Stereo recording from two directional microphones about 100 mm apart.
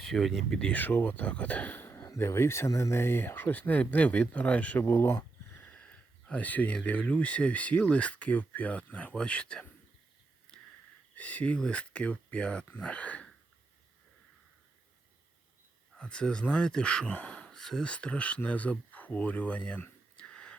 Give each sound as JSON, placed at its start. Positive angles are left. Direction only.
{"t": 0.0, "sound": "speech", "side_deg": 0}
{"t": 0.6, "sound": "speech", "side_deg": 15}
{"t": 5.6, "sound": "speech", "side_deg": 10}
{"t": 11.1, "sound": "speech", "side_deg": 15}
{"t": 16.0, "sound": "speech", "side_deg": 10}
{"t": 20.1, "sound": "whispering", "side_deg": 10}